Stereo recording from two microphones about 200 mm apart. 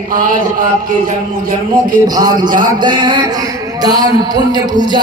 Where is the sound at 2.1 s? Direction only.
20° right (ahead or behind).